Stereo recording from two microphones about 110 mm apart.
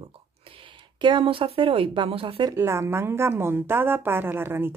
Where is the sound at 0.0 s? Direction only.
55° right (ahead or behind).